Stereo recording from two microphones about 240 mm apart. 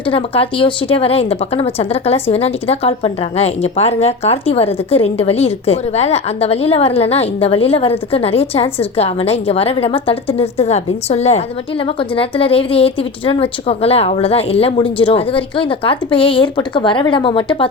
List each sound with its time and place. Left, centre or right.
0.0 s speech: left